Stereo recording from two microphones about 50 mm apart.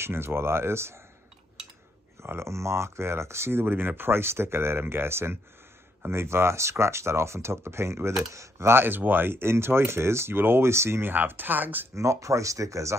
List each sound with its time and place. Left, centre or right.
0.0 s speech: right
2.2 s speech: right
8.2 s speech: right
8.8 s speech: right
11.1 s speech: right
11.9 s speech: right